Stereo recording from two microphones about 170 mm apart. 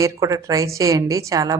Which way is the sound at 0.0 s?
20° right (ahead or behind).